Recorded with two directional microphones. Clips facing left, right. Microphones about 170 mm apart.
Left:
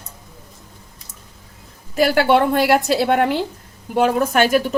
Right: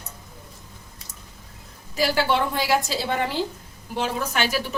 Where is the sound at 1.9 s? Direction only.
55° left (ahead or behind).